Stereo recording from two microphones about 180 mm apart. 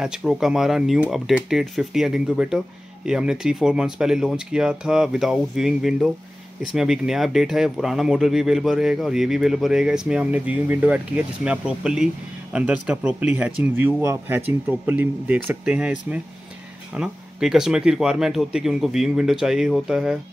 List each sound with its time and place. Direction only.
0.0 s speech: 5° right (ahead or behind)